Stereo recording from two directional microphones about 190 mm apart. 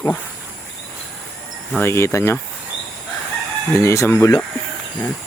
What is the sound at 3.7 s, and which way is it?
Speech, 15° left (ahead or behind).